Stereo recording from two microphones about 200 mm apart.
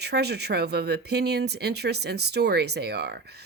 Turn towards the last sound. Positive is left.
turn(degrees=-55)  # may be behind; listen again after turning